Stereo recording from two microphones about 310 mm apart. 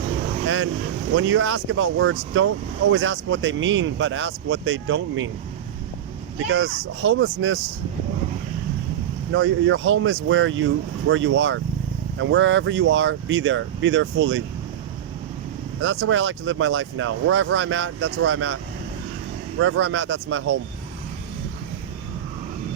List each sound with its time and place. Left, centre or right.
0.4 s speech: right
6.5 s speech: right
9.3 s speech: right
15.8 s speech: right